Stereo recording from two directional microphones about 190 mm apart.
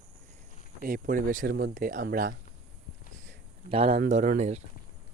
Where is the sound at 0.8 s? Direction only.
45° right (ahead or behind).